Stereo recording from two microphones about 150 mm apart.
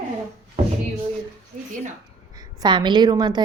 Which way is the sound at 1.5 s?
50° right (ahead or behind).